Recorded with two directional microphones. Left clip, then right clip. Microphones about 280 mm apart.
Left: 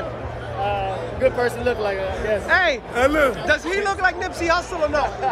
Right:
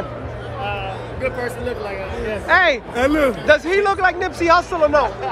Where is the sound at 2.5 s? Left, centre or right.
Centre.